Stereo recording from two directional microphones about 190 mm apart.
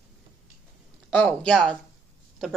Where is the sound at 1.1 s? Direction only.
5° left (ahead or behind).